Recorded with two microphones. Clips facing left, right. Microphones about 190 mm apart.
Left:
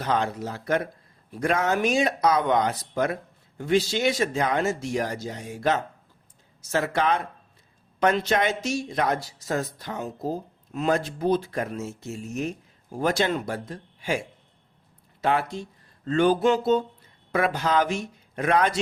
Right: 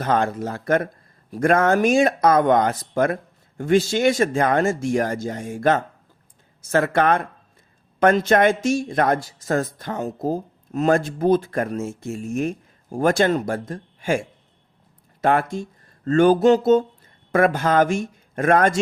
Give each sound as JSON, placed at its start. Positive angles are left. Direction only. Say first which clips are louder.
{"t": 0.0, "sound": "speech", "louder": "right 5 dB", "side_deg": -50}
{"t": 15.2, "sound": "speech", "louder": "right 5 dB", "side_deg": -50}